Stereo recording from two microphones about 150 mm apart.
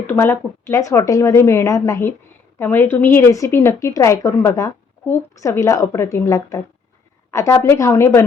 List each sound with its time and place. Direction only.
0.1 s a woman's voice: 15° left (ahead or behind)